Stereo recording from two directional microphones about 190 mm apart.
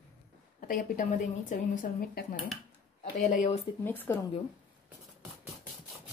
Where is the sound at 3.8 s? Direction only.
10° left (ahead or behind).